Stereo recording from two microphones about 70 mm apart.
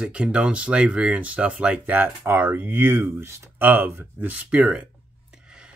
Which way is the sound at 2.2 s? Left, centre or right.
Right.